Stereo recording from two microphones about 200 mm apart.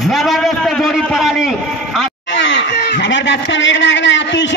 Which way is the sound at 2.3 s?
60° left (ahead or behind).